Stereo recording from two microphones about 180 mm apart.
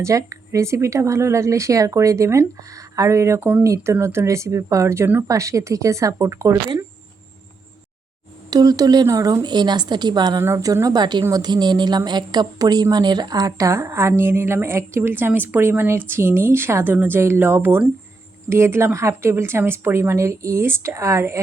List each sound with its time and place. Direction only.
0.0 s a woman's voice: 15° right (ahead or behind)
8.4 s a woman's voice: 20° right (ahead or behind)